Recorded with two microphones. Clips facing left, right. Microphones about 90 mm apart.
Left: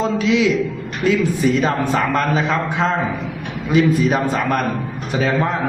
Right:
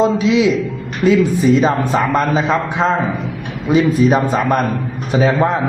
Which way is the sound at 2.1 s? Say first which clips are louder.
Right 3 dB; 15° right (ahead or behind).